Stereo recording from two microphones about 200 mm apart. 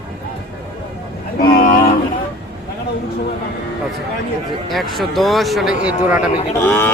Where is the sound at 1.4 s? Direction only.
45° left (ahead or behind).